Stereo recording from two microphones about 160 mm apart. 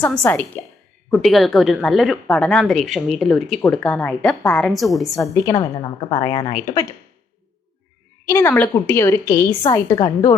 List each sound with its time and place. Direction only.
0.0 s a woman's voice: 10° left (ahead or behind)
5.2 s a woman's voice: 20° left (ahead or behind)
8.3 s a woman's voice: 15° left (ahead or behind)